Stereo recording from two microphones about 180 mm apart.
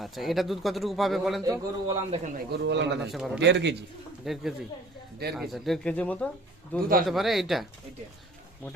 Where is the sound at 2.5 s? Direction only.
75° right (ahead or behind).